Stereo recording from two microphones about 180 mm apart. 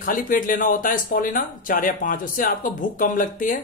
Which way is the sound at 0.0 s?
45° left (ahead or behind).